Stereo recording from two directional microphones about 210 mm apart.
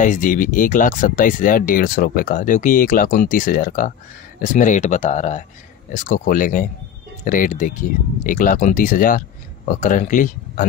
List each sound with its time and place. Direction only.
0.0 s speech: 40° left (ahead or behind)